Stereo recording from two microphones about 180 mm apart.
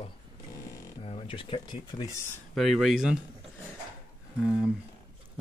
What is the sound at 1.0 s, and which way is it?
Speech, 30° left (ahead or behind).